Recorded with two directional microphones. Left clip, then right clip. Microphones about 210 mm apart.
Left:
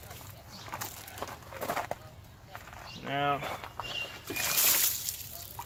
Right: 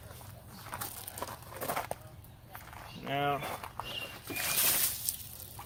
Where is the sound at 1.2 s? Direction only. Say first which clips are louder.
Left 2 dB; 25° right (ahead or behind).